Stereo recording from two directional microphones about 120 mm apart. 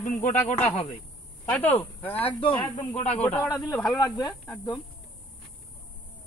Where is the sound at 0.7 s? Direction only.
55° left (ahead or behind).